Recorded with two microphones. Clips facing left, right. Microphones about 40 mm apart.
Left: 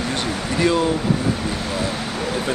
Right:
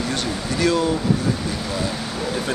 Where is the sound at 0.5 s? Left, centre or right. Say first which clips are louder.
Left 1 dB; centre.